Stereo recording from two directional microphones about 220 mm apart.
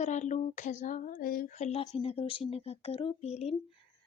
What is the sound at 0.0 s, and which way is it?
Speech, 35° left (ahead or behind).